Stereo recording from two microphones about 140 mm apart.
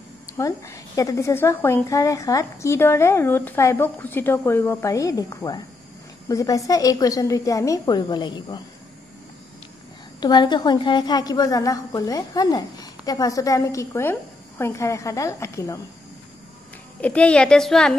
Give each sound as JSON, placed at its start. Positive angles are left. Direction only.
{"t": 0.3, "sound": "a woman's voice", "side_deg": 25}
{"t": 10.2, "sound": "a woman's voice", "side_deg": 30}
{"t": 17.0, "sound": "a child's voice", "side_deg": 10}